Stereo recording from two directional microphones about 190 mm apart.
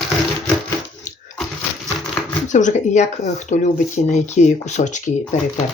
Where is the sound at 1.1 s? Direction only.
40° left (ahead or behind).